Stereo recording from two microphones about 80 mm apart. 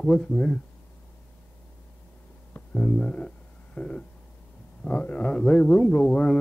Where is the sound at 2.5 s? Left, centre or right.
Centre.